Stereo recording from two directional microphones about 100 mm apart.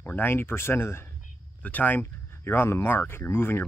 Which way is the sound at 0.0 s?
20° left (ahead or behind).